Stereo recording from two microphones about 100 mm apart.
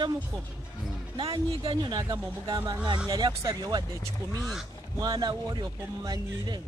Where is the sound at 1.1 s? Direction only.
65° right (ahead or behind).